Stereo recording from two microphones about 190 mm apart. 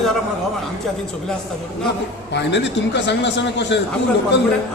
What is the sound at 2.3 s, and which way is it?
A man's voice, 65° left (ahead or behind).